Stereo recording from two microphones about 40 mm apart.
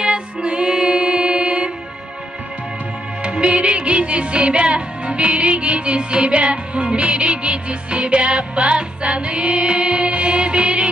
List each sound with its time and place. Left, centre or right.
0.0 s music: right
3.2 s music: right